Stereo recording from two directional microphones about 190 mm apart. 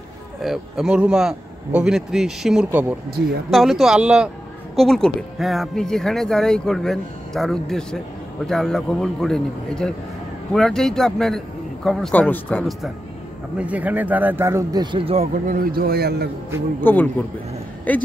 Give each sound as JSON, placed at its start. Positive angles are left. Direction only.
{"t": 0.4, "sound": "speech", "side_deg": 0}
{"t": 13.6, "sound": "speech", "side_deg": -5}
{"t": 15.4, "sound": "a man's voice", "side_deg": -50}
{"t": 16.8, "sound": "speech", "side_deg": 10}